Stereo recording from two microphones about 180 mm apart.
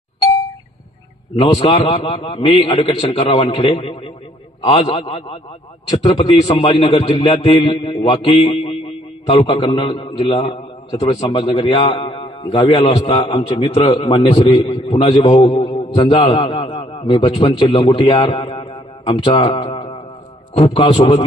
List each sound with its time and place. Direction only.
1.4 s a man's voice: 30° left (ahead or behind)